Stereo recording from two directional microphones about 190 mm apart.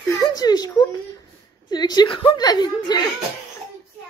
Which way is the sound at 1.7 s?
20° left (ahead or behind).